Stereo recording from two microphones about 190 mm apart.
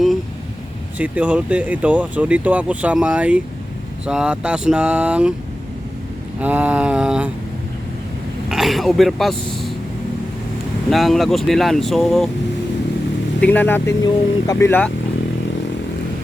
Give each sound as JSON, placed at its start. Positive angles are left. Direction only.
{"t": 0.9, "sound": "speech", "side_deg": -5}
{"t": 6.4, "sound": "speech", "side_deg": -10}
{"t": 8.4, "sound": "speech", "side_deg": 0}
{"t": 10.8, "sound": "speech", "side_deg": 0}
{"t": 13.4, "sound": "speech", "side_deg": 10}